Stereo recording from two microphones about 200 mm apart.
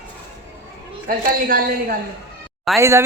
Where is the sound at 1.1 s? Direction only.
45° right (ahead or behind).